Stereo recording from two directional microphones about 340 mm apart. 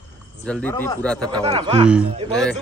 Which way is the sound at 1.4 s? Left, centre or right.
Centre.